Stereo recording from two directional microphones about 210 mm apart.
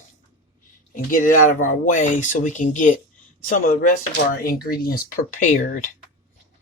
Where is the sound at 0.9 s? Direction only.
40° left (ahead or behind).